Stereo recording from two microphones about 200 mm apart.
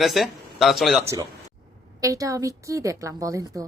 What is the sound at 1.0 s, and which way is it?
A man's voice, 15° right (ahead or behind).